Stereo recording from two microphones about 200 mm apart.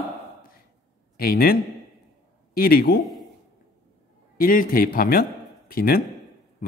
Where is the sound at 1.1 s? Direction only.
50° left (ahead or behind).